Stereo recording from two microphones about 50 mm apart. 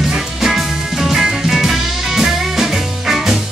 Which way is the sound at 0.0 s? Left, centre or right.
Centre.